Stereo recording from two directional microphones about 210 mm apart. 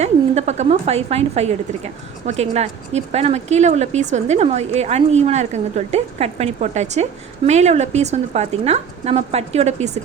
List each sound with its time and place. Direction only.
0.0 s a woman's voice: 30° right (ahead or behind)